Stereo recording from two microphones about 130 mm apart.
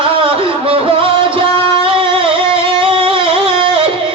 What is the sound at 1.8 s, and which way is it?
Music, 45° right (ahead or behind).